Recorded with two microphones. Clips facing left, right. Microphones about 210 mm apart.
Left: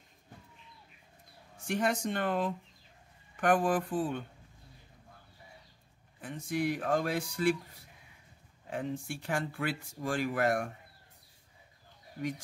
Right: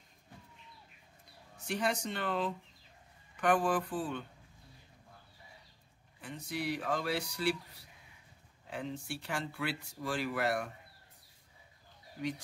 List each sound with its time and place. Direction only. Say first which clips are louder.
1.7 s speech: left 3 dB; 50° left (ahead or behind)
6.2 s speech: left 5 dB; 50° left (ahead or behind)